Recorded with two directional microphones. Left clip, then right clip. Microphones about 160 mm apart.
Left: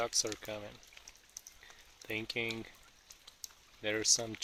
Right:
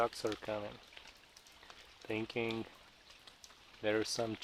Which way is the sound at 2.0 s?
5° left (ahead or behind).